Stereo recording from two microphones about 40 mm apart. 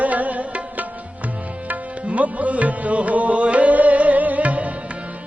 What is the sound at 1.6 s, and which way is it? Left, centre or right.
Tabla, right.